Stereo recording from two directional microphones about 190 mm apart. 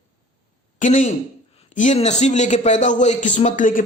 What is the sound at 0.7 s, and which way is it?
Speech, 40° left (ahead or behind).